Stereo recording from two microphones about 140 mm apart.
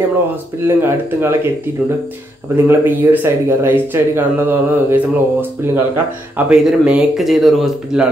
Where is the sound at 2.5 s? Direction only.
15° right (ahead or behind).